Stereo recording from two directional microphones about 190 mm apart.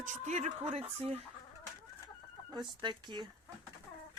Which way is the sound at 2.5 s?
25° right (ahead or behind).